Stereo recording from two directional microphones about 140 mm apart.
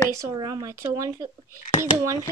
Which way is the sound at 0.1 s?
25° right (ahead or behind).